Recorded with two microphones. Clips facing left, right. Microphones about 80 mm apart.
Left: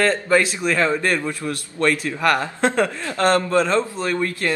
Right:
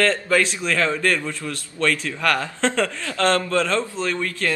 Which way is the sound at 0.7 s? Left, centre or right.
Left.